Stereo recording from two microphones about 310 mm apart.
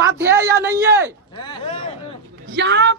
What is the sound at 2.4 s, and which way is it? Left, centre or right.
Speech, right.